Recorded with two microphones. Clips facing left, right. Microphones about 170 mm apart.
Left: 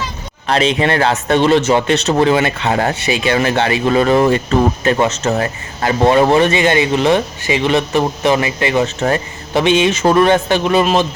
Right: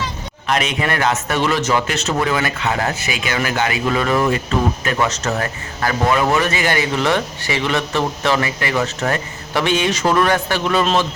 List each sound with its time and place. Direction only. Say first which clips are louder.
0.4 s speech: left 5 dB; 30° left (ahead or behind)